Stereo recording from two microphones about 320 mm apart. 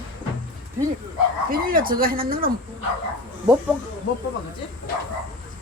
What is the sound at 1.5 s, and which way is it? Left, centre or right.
Speech, right.